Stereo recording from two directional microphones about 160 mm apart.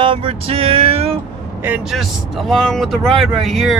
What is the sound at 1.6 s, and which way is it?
Speech, 5° right (ahead or behind).